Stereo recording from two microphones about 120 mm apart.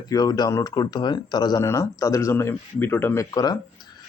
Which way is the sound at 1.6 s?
25° left (ahead or behind).